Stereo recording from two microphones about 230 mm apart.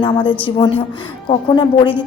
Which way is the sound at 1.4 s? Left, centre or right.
Centre.